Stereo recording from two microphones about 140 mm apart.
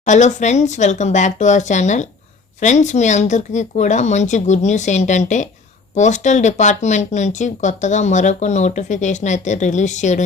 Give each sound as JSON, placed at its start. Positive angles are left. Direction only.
{"t": 0.0, "sound": "speech", "side_deg": 60}